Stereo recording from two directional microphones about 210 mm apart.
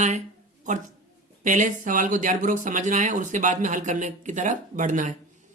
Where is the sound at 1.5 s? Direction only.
40° right (ahead or behind).